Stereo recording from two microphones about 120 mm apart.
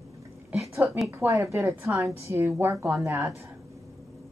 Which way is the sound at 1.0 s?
25° right (ahead or behind).